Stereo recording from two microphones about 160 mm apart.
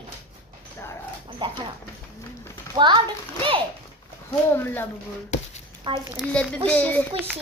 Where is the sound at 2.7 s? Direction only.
30° right (ahead or behind).